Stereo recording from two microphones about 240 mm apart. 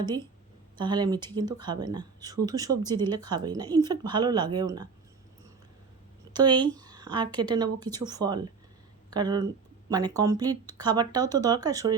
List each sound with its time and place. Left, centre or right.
0.8 s speech: centre
6.3 s speech: centre